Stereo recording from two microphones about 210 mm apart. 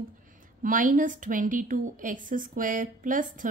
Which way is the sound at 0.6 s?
40° right (ahead or behind).